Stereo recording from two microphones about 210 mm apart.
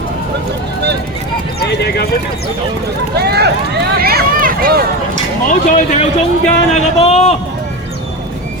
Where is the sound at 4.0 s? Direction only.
45° right (ahead or behind).